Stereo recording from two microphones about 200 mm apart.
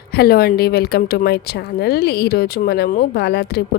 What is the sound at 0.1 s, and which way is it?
Speech, 50° left (ahead or behind).